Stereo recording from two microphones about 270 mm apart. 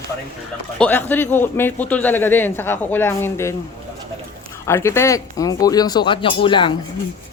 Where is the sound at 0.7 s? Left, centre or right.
Centre.